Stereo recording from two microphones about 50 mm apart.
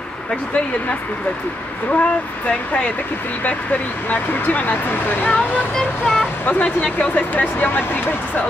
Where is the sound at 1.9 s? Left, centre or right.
Left.